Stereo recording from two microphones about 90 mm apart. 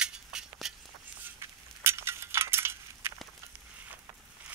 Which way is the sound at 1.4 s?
30° right (ahead or behind).